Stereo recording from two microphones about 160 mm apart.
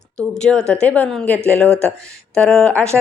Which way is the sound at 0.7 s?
10° left (ahead or behind).